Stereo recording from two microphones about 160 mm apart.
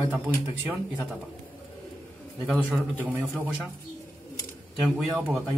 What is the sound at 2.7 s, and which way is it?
Speech, 10° right (ahead or behind).